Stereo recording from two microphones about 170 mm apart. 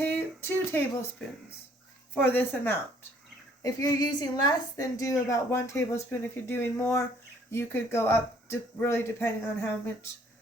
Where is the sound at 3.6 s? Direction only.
20° left (ahead or behind).